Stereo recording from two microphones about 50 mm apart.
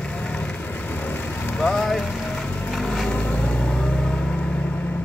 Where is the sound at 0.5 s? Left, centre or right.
Left.